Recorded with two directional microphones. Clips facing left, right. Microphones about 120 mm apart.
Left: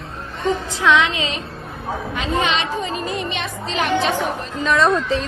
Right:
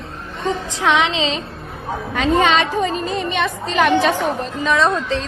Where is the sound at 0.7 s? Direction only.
20° right (ahead or behind).